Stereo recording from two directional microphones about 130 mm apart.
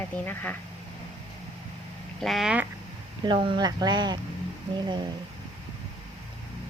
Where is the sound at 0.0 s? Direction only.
15° left (ahead or behind).